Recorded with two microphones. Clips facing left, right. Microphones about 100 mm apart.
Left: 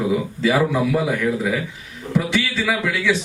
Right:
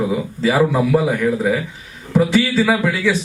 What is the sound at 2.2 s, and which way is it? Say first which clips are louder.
Speech: right 7 dB; 40° right (ahead or behind).